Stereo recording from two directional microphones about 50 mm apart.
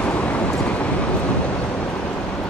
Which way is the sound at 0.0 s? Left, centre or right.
Left.